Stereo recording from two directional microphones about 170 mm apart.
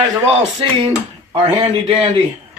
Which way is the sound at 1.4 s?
35° right (ahead or behind).